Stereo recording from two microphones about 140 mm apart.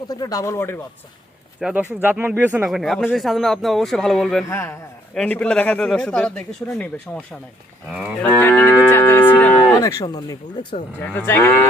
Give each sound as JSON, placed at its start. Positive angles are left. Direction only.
{"t": 0.1, "sound": "speech", "side_deg": 25}
{"t": 1.6, "sound": "speech", "side_deg": -10}
{"t": 2.6, "sound": "speech", "side_deg": 0}
{"t": 4.4, "sound": "speech", "side_deg": 20}
{"t": 7.9, "sound": "speech", "side_deg": -10}
{"t": 8.2, "sound": "livestock", "side_deg": 15}
{"t": 9.8, "sound": "speech", "side_deg": 25}
{"t": 11.3, "sound": "speech", "side_deg": 20}